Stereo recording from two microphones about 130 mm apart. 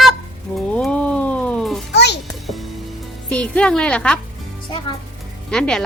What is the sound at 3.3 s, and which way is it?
Speech, 10° left (ahead or behind).